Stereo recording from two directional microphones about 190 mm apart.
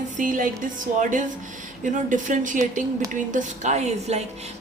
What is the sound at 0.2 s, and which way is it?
Speech, 45° right (ahead or behind).